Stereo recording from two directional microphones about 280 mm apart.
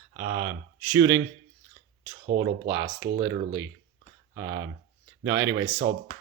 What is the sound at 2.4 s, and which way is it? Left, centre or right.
Speech, centre.